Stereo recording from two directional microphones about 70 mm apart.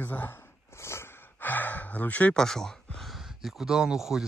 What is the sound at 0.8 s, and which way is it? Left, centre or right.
Snort, left.